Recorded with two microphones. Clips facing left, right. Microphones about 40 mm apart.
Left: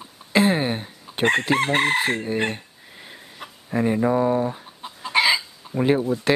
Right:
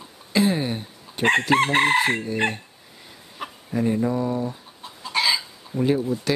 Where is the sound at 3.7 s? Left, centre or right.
Left.